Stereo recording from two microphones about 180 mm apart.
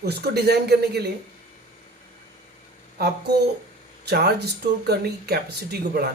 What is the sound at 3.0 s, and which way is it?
A woman's voice, 60° right (ahead or behind).